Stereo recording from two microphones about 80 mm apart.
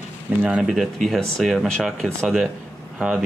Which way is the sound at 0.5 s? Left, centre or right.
Centre.